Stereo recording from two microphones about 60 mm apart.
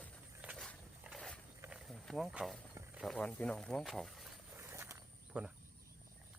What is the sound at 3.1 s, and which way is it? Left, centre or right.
Speech, centre.